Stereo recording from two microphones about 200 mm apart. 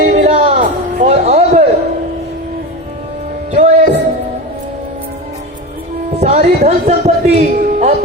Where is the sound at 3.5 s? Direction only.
35° right (ahead or behind).